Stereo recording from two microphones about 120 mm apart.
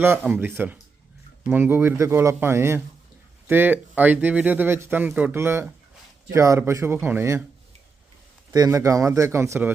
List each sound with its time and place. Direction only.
0.0 s a man's voice: 15° right (ahead or behind)
8.5 s a man's voice: 30° right (ahead or behind)